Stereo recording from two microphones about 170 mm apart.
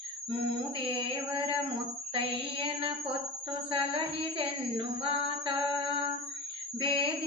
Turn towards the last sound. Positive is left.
turn(degrees=-30)  # may be behind; listen again after turning